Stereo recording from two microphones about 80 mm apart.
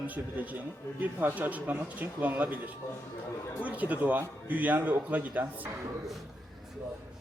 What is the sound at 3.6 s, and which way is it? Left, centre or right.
Speech, centre.